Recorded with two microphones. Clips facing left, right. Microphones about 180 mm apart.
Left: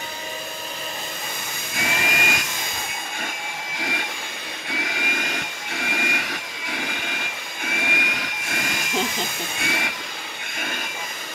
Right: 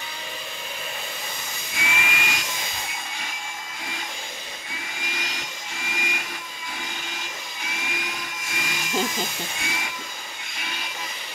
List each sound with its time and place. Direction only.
1.8 s vacuum cleaner: 40° left (ahead or behind)
3.7 s vacuum cleaner: 90° left
5.1 s vacuum cleaner: 55° left (ahead or behind)
9.6 s a sound: 65° left (ahead or behind)
10.6 s jet engine: 50° left (ahead or behind)